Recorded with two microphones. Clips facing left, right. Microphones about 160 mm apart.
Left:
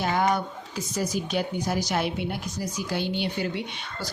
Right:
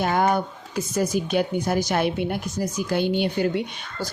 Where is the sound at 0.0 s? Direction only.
50° right (ahead or behind).